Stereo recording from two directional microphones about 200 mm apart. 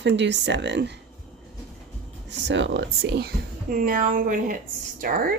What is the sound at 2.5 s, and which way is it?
Speech, 65° right (ahead or behind).